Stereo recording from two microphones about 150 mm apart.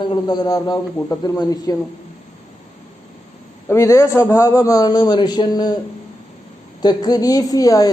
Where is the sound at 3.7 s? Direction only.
20° left (ahead or behind).